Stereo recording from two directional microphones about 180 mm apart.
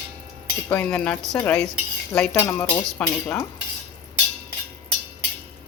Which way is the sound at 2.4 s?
20° left (ahead or behind).